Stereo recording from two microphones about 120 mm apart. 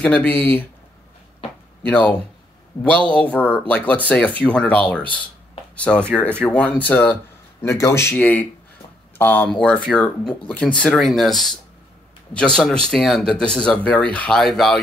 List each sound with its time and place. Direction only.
0.0 s speech: 10° left (ahead or behind)
1.9 s speech: 10° left (ahead or behind)
7.6 s speech: 25° left (ahead or behind)
9.5 s speech: 5° left (ahead or behind)
12.5 s speech: 5° left (ahead or behind)